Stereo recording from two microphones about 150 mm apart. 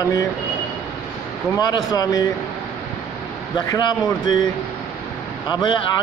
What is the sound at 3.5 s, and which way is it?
Speech, 25° left (ahead or behind).